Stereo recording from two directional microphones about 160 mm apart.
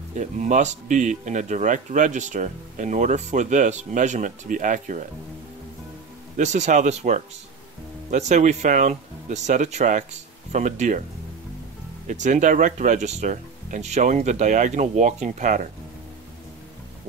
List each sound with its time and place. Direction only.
0.1 s speech: 50° right (ahead or behind)
6.3 s speech: 50° right (ahead or behind)
12.1 s speech: 50° right (ahead or behind)